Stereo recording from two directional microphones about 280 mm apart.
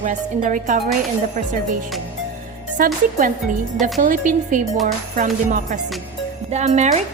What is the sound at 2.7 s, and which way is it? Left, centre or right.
A woman's voice, right.